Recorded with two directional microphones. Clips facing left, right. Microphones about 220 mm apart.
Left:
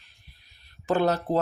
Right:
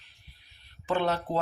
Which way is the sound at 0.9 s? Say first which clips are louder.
Left 4 dB; 40° left (ahead or behind).